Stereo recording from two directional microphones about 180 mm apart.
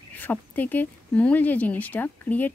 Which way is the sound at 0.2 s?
10° left (ahead or behind).